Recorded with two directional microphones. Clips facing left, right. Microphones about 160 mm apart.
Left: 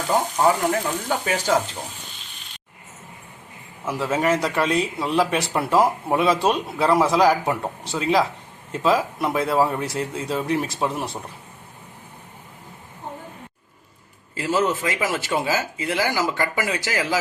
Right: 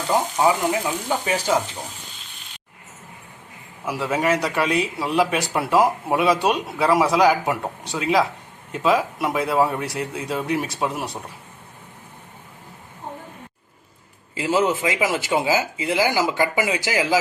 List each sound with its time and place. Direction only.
0.3 s speech: 5° right (ahead or behind)
3.8 s speech: centre (ahead or behind)
14.3 s speech: 20° right (ahead or behind)